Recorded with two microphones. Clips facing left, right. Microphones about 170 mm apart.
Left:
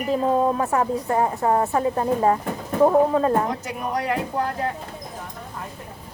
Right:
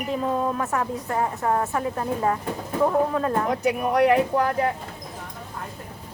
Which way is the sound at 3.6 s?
65° right (ahead or behind).